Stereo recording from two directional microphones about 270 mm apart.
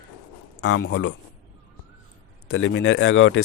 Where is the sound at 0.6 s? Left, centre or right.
Left.